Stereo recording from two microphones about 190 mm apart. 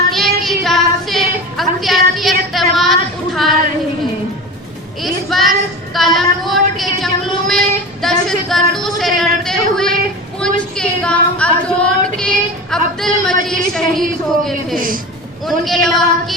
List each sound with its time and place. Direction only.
0.1 s child singing: centre (ahead or behind)
5.0 s child singing: centre (ahead or behind)
8.0 s a sound: centre (ahead or behind)
12.7 s speech: 5° left (ahead or behind)
14.8 s speech: 45° right (ahead or behind)
15.4 s speech: centre (ahead or behind)